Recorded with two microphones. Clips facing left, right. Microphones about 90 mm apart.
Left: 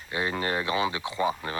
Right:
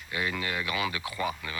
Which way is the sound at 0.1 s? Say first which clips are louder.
Left 4 dB; 30° left (ahead or behind).